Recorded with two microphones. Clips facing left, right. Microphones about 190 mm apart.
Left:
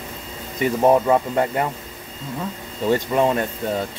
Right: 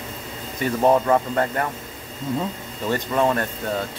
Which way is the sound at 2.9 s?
15° left (ahead or behind).